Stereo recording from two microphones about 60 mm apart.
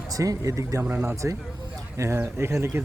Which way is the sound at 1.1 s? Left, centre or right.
Right.